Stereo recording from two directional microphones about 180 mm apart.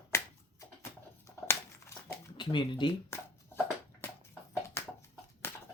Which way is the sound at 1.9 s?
15° left (ahead or behind).